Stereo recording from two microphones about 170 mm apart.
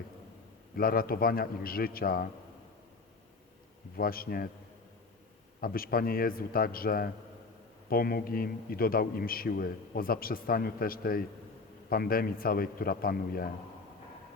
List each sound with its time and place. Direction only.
0.8 s a man's voice: 60° left (ahead or behind)
3.9 s a man's voice: 60° left (ahead or behind)
5.5 s a man's voice: 60° left (ahead or behind)